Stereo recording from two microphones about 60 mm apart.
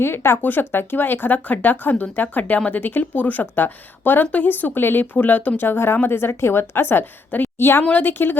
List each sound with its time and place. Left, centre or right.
0.0 s speech: left